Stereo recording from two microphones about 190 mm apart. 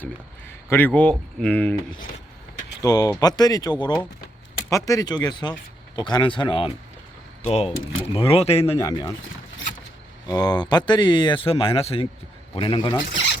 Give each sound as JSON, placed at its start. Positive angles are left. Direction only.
{"t": 0.7, "sound": "speech", "side_deg": 10}
{"t": 2.8, "sound": "speech", "side_deg": 20}
{"t": 8.8, "sound": "speech", "side_deg": 20}
{"t": 10.2, "sound": "speech", "side_deg": 20}